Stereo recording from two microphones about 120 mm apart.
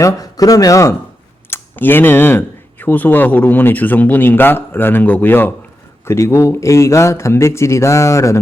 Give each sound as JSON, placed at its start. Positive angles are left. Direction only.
{"t": 0.0, "sound": "speech", "side_deg": 30}